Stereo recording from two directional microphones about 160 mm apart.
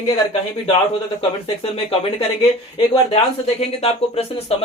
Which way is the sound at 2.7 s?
40° left (ahead or behind).